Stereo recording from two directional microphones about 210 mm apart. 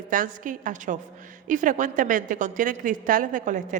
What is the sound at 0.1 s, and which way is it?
A woman's voice, 40° right (ahead or behind).